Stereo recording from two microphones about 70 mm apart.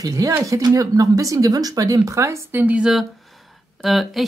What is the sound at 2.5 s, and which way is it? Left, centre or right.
Speech, right.